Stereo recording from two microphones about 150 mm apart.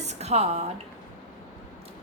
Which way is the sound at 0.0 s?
45° right (ahead or behind).